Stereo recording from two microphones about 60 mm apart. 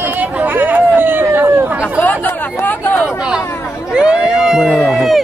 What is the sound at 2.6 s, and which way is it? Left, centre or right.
Speech, left.